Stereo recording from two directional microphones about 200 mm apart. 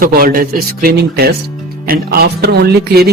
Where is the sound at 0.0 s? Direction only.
45° right (ahead or behind).